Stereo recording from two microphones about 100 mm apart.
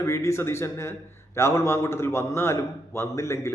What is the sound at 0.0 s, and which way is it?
A man's voice, 30° left (ahead or behind).